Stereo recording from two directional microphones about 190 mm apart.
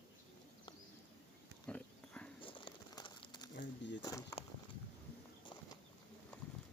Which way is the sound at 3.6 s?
70° left (ahead or behind).